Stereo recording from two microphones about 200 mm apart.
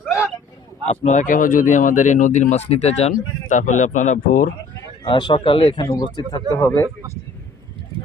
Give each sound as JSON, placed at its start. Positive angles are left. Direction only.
{"t": 0.9, "sound": "speech", "side_deg": 40}
{"t": 5.0, "sound": "speech", "side_deg": 25}